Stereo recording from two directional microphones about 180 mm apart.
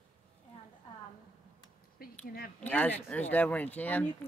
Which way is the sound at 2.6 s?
10° left (ahead or behind).